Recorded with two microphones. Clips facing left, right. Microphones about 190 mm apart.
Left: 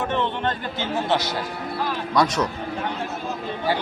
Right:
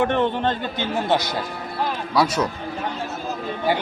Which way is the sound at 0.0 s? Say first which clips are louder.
Right 5 dB; 60° right (ahead or behind).